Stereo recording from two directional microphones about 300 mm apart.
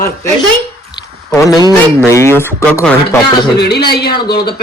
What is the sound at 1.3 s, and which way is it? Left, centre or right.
A man's voice, centre.